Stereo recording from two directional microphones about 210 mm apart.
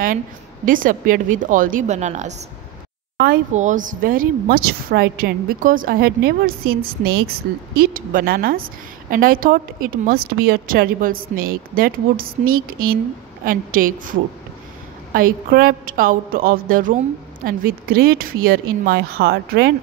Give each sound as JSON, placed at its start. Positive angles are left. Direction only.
{"t": 0.7, "sound": "a woman's voice", "side_deg": -40}
{"t": 7.9, "sound": "a woman's voice", "side_deg": -40}